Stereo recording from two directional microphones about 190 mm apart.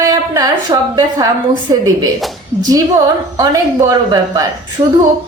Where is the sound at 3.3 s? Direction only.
20° right (ahead or behind).